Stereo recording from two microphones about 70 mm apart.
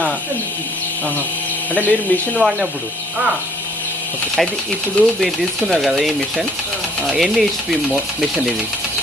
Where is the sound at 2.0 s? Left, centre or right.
Left.